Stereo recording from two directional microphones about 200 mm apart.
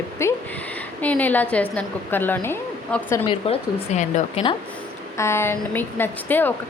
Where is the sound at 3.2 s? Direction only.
30° left (ahead or behind).